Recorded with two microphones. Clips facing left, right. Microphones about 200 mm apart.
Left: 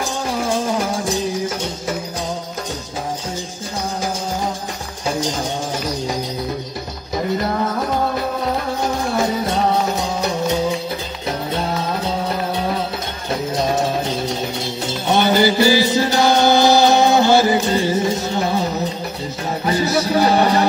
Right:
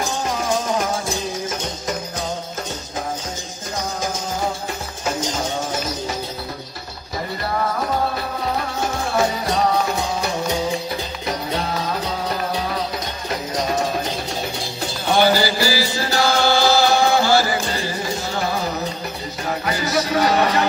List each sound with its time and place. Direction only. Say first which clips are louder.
15.0 s music: left 2 dB; 20° left (ahead or behind)
19.6 s music: left 5 dB; 30° left (ahead or behind)